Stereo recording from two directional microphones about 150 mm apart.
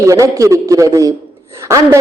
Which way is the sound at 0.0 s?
20° right (ahead or behind).